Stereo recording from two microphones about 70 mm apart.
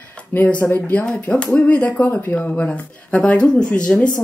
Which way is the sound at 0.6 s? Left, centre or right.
Left.